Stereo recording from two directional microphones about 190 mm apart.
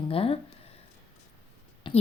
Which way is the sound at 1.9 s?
25° left (ahead or behind).